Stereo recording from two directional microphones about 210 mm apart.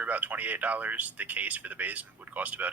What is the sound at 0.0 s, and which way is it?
Speech, 5° right (ahead or behind).